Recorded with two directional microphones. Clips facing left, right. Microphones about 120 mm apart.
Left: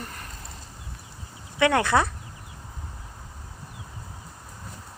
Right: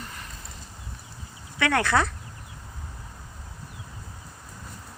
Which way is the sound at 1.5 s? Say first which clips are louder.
Left 2 dB; 20° left (ahead or behind).